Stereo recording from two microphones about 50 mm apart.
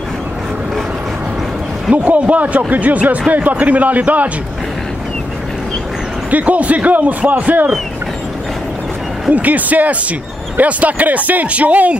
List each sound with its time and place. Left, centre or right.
2.0 s a man's voice: right
6.3 s a man's voice: right
9.3 s a man's voice: right